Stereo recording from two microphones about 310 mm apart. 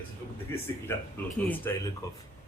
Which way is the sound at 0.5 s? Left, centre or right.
Centre.